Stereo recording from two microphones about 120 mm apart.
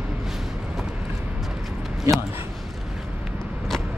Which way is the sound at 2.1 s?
25° right (ahead or behind).